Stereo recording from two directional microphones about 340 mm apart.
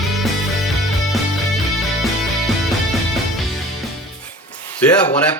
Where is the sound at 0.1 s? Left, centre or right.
Centre.